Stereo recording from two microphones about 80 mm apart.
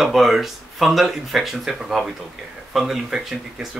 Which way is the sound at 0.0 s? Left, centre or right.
Centre.